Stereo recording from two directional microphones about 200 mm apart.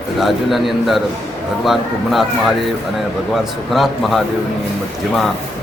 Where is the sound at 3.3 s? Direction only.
Centre (ahead or behind).